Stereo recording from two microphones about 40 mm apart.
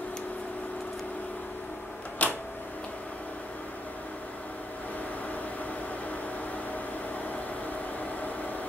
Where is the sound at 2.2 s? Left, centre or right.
Left.